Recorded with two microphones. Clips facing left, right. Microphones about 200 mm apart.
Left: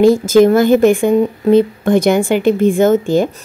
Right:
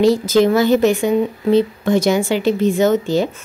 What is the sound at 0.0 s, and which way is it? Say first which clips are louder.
A woman's voice: left 4 dB; 50° left (ahead or behind).